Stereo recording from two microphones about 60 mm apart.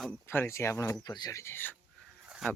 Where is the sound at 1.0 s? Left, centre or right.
Left.